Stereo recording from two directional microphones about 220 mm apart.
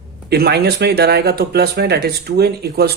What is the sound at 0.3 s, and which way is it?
Speech, 45° right (ahead or behind).